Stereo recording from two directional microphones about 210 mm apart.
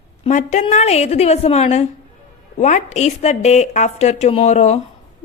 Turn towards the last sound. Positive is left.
turn(degrees=30)  # may be behind; listen again after turning